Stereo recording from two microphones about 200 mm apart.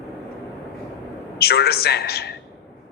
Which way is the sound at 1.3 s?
50° left (ahead or behind).